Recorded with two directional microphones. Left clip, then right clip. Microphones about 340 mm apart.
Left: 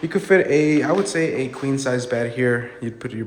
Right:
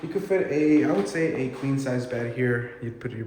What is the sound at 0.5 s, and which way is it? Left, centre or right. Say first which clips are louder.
A man's voice: left 4 dB; centre.